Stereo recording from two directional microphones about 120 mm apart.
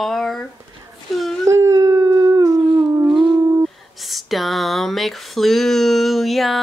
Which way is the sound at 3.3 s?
20° right (ahead or behind).